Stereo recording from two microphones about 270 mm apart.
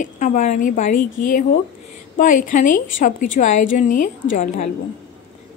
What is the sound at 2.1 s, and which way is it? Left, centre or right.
Speech, left.